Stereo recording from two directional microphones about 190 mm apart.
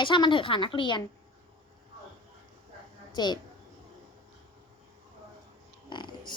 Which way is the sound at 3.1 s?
20° left (ahead or behind).